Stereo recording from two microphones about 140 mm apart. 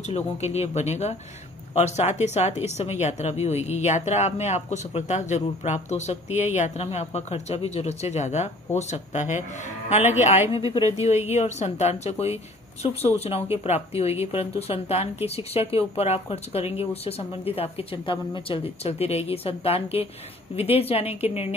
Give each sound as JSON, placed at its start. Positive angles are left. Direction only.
{"t": 0.1, "sound": "speech", "side_deg": 50}
{"t": 10.4, "sound": "speech", "side_deg": -25}
{"t": 11.0, "sound": "speech", "side_deg": 50}